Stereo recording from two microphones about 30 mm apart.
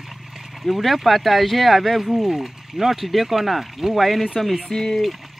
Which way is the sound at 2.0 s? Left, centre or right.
Centre.